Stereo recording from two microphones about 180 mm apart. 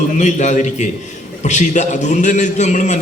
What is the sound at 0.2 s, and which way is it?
A man's voice, 40° left (ahead or behind).